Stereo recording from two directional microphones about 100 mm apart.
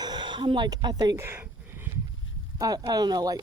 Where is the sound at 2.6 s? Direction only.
40° right (ahead or behind).